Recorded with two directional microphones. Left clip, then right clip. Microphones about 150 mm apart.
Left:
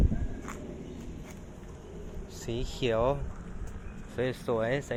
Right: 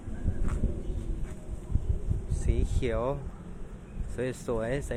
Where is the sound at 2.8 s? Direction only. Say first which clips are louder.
Left 3 dB; 5° right (ahead or behind).